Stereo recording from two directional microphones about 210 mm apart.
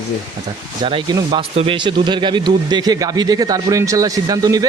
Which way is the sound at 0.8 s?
20° right (ahead or behind).